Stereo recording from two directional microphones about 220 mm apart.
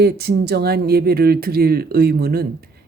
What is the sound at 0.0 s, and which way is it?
Speech, 45° right (ahead or behind).